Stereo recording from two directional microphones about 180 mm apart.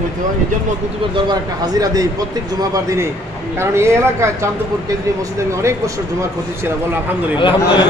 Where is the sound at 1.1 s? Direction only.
25° right (ahead or behind).